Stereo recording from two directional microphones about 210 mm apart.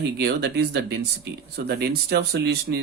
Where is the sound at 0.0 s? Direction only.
50° right (ahead or behind).